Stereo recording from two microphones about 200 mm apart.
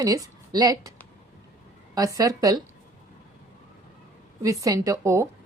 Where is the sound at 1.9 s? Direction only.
15° right (ahead or behind).